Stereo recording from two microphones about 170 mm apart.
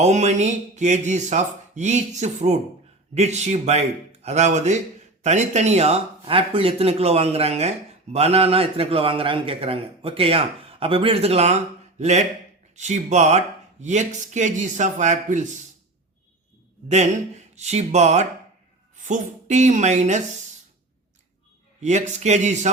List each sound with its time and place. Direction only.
0.0 s a man's voice: 40° right (ahead or behind)
17.5 s a man's voice: 40° right (ahead or behind)
21.8 s speech: 45° right (ahead or behind)